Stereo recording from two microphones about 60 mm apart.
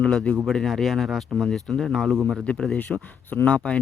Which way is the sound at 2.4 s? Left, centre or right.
Left.